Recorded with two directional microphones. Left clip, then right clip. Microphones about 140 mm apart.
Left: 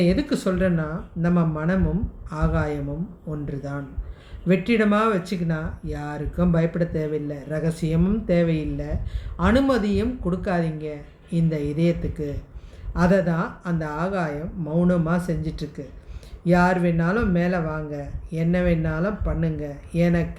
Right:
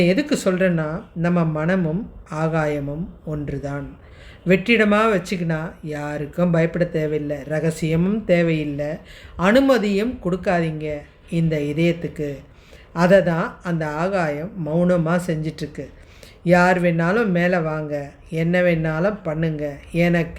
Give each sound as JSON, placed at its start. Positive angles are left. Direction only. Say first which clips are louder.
{"t": 0.0, "sound": "speech", "louder": "right 4 dB", "side_deg": -50}